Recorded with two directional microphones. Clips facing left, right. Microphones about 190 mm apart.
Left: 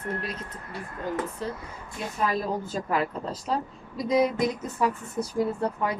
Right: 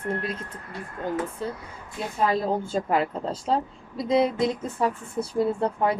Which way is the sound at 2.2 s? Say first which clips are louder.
Right 4 dB; 25° right (ahead or behind).